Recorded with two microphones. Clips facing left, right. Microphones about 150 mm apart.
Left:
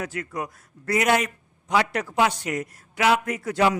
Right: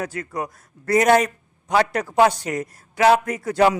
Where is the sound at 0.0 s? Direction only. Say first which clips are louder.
Right 3 dB; 35° right (ahead or behind).